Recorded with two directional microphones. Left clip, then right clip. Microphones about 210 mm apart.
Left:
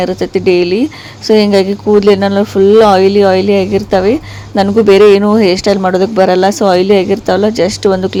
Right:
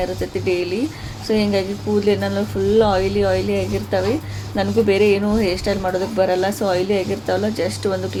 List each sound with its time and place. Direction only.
0.0 s speech: 40° left (ahead or behind)